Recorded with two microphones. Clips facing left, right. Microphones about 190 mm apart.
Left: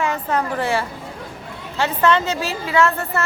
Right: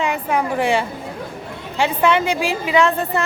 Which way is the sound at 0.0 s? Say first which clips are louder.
Right 1 dB; 10° right (ahead or behind).